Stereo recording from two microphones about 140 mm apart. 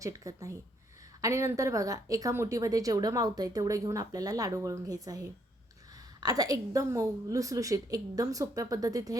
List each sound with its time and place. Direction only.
0.0 s speech: 25° right (ahead or behind)